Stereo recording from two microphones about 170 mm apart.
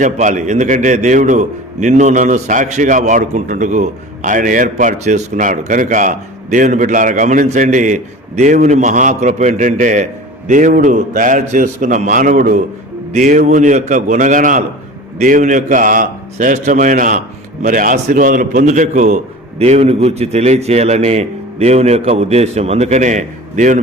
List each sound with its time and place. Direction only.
0.0 s a man's voice: 50° right (ahead or behind)